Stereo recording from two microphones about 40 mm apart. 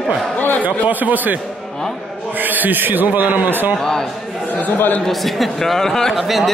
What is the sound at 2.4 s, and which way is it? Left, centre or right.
A man's voice, right.